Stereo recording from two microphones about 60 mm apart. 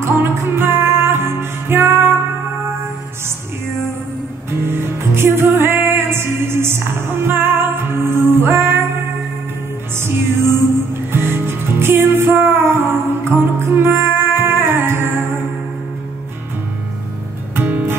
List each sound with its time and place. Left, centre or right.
0.0 s music: right
4.6 s music: right
9.9 s music: right
17.6 s music: right